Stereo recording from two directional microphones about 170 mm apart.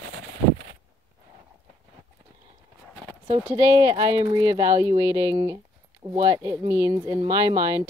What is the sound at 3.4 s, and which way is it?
Speech, 15° right (ahead or behind).